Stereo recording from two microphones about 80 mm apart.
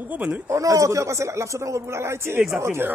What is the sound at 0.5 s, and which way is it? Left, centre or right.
Speech, right.